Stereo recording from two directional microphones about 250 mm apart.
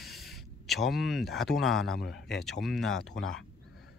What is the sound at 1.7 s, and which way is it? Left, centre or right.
Speech, left.